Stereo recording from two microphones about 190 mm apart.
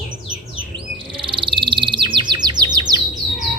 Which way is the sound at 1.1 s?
25° right (ahead or behind).